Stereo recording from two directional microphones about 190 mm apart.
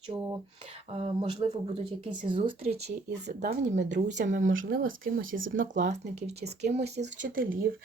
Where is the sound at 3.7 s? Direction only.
65° right (ahead or behind).